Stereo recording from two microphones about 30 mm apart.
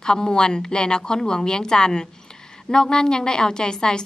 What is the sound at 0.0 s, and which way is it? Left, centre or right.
A woman's voice, left.